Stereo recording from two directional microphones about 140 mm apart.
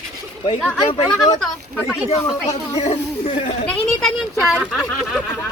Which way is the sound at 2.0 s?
50° left (ahead or behind).